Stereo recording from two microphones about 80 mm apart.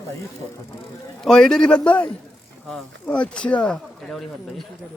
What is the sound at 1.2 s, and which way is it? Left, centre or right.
Speech, centre.